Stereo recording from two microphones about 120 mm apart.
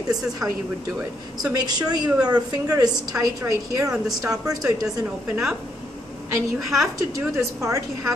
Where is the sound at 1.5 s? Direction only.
35° right (ahead or behind).